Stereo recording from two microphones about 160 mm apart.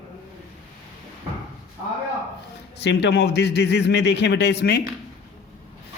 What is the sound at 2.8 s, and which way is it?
A man's voice, 90° left.